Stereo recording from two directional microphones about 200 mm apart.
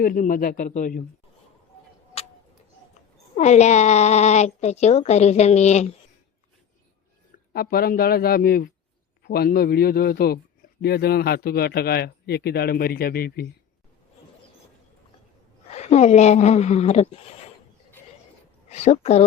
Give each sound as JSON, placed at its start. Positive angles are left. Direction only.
{"t": 0.0, "sound": "a man's voice", "side_deg": 45}
{"t": 3.3, "sound": "speech", "side_deg": 35}
{"t": 7.5, "sound": "a man's voice", "side_deg": 50}
{"t": 15.7, "sound": "speech", "side_deg": 35}
{"t": 18.7, "sound": "speech", "side_deg": 35}